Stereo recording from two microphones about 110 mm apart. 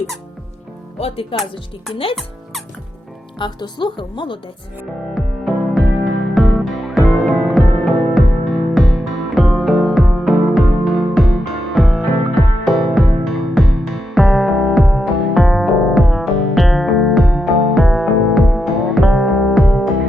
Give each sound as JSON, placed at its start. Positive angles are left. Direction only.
{"t": 0.9, "sound": "speech", "side_deg": 60}
{"t": 3.3, "sound": "a woman's voice", "side_deg": 45}
{"t": 5.1, "sound": "music", "side_deg": 0}